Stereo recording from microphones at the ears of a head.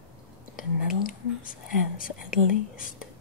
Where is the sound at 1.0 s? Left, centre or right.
Left.